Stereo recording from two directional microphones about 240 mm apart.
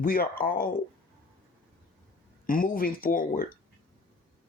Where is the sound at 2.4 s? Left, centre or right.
Left.